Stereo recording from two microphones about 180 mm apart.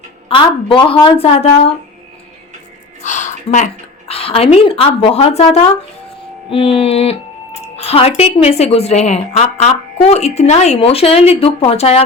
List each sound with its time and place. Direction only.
0.3 s a woman's voice: 30° left (ahead or behind)
3.0 s a sound: 40° left (ahead or behind)
4.1 s a woman's voice: 30° left (ahead or behind)